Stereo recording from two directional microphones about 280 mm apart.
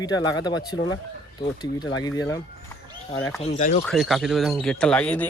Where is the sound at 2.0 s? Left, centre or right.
Centre.